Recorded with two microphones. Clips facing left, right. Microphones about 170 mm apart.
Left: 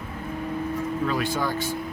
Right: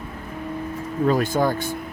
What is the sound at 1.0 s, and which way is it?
Speech, 45° right (ahead or behind).